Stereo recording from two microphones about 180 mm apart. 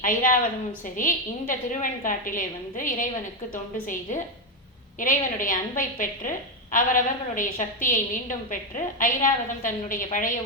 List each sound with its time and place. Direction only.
0.0 s a woman's voice: 50° left (ahead or behind)